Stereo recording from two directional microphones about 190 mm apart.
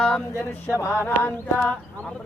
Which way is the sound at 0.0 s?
10° left (ahead or behind).